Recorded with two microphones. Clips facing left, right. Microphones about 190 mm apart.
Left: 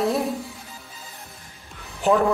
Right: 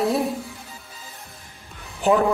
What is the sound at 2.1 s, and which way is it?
Speech, centre (ahead or behind).